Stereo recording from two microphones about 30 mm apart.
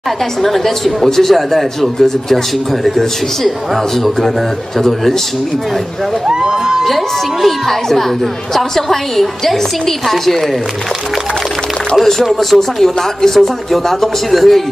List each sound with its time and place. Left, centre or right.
0.4 s a man's voice: centre
4.7 s a man's voice: centre
6.2 s speech: right
7.4 s a man's voice: centre
12.0 s speech: centre